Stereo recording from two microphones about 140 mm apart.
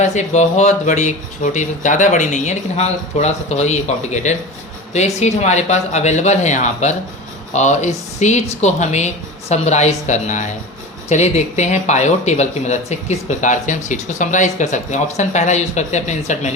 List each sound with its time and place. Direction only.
0.0 s speech: 55° left (ahead or behind)